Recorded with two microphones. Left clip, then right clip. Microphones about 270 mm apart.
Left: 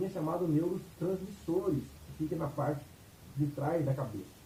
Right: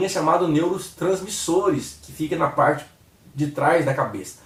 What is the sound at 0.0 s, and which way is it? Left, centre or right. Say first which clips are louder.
Speech: right 15 dB; centre.